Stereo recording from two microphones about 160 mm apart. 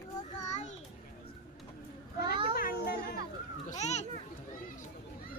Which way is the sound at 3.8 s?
45° left (ahead or behind).